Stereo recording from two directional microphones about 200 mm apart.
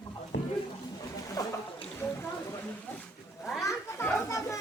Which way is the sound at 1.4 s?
15° left (ahead or behind).